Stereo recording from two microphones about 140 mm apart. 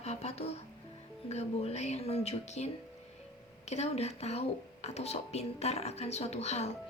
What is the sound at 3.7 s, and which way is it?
Speech, 50° left (ahead or behind).